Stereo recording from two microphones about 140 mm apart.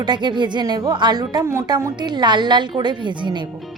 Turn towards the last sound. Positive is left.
turn(degrees=-35)  # may be behind; listen again after turning